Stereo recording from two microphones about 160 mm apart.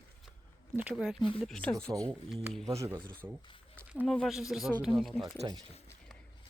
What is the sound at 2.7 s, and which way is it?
Speech, 20° right (ahead or behind).